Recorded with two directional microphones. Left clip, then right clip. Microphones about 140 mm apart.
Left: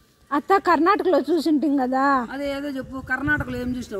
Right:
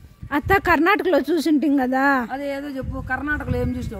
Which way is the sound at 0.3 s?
20° right (ahead or behind).